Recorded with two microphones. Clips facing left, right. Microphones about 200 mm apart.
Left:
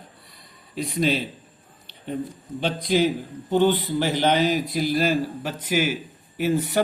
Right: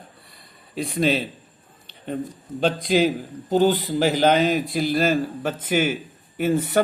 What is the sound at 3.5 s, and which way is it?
Speech, 40° right (ahead or behind).